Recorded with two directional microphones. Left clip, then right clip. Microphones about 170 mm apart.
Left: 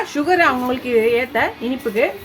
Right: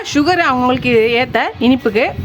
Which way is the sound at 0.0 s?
50° right (ahead or behind).